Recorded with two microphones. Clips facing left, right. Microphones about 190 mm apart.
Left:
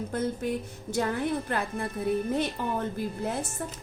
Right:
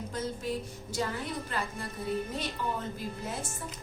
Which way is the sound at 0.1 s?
60° left (ahead or behind).